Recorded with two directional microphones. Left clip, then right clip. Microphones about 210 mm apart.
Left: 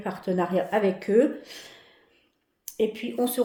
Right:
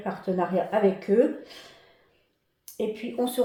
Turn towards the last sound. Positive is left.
turn(degrees=40)  # may be behind; listen again after turning